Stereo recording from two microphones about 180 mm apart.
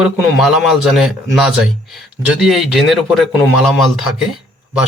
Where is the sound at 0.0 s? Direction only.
5° right (ahead or behind).